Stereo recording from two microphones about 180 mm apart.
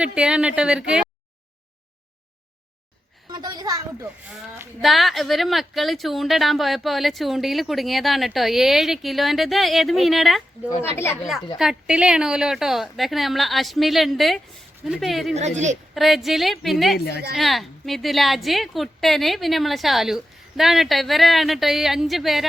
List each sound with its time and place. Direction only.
0.0 s speech: 5° right (ahead or behind)
3.3 s a sound: 20° right (ahead or behind)
4.3 s speech: 5° right (ahead or behind)
10.9 s speech: 15° left (ahead or behind)
11.5 s speech: 5° right (ahead or behind)
15.4 s speech: 40° right (ahead or behind)
16.0 s speech: centre (ahead or behind)
17.0 s a woman's voice: 65° left (ahead or behind)
17.3 s speech: centre (ahead or behind)